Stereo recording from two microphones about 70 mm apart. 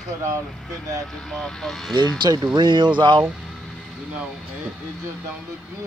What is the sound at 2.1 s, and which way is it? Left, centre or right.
Speech, right.